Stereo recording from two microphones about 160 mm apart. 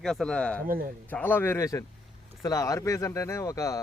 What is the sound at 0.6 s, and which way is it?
Speech, 60° right (ahead or behind).